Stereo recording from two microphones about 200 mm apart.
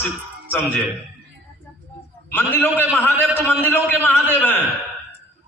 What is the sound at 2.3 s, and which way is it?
A man's voice, 10° left (ahead or behind).